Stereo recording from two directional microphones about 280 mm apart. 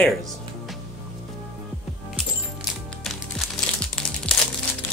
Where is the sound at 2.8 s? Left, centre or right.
Centre.